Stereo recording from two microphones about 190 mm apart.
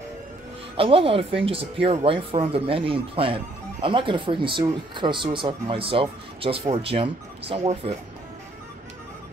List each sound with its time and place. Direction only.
0.7 s speech: 30° right (ahead or behind)